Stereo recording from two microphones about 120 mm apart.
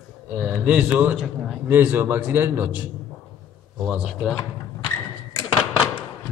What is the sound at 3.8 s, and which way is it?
Speech, 5° right (ahead or behind).